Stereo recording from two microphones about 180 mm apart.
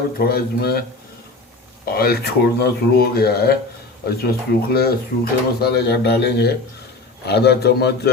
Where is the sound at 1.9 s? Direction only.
60° left (ahead or behind).